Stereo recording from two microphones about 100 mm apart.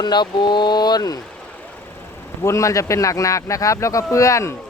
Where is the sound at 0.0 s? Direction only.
50° left (ahead or behind).